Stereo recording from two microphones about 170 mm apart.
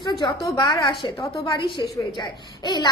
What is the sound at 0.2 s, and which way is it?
A woman's voice, 20° left (ahead or behind).